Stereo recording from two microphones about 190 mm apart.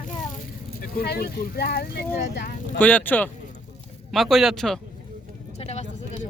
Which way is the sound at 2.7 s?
10° left (ahead or behind).